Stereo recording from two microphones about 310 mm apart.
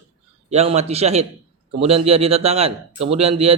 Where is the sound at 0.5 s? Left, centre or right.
Centre.